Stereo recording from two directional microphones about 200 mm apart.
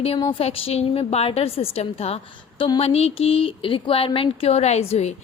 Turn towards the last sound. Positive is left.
turn(degrees=30)  # may be behind; listen again after turning